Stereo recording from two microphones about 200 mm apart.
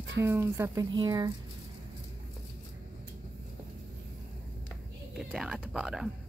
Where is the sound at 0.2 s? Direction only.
10° right (ahead or behind).